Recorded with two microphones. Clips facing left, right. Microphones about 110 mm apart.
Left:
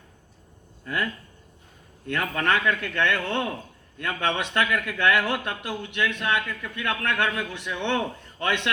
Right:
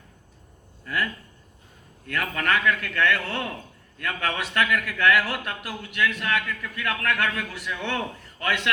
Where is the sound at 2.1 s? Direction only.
25° left (ahead or behind).